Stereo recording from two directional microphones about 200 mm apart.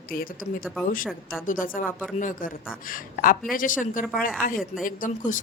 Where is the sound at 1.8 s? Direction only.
5° right (ahead or behind).